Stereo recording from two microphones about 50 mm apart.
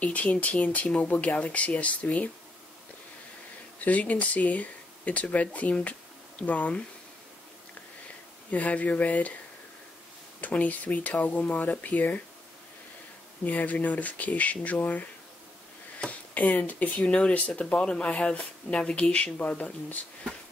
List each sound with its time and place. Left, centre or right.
0.0 s speech: left
3.8 s speech: left
8.5 s speech: left
10.4 s speech: left
13.5 s speech: left
16.3 s speech: left